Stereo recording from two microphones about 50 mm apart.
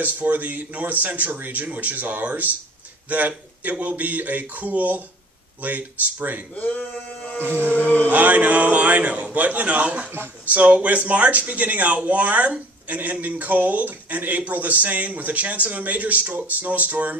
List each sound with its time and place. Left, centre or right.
0.0 s speech: right
6.7 s male singing: left
7.5 s chant: left
8.1 s speech: right